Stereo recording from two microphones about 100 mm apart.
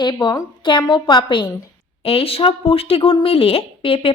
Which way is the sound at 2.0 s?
70° left (ahead or behind).